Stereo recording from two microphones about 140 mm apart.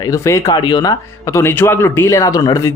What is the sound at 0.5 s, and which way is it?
A man's voice, 30° left (ahead or behind).